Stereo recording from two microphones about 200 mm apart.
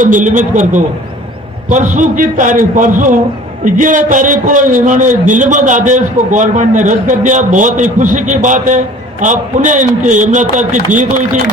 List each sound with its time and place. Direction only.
0.0 s a man's voice: 40° right (ahead or behind)